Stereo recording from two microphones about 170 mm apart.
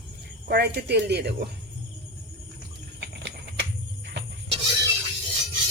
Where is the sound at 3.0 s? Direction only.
90° right.